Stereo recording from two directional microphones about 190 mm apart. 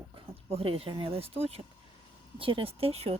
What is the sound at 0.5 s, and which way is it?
Speech, 30° right (ahead or behind).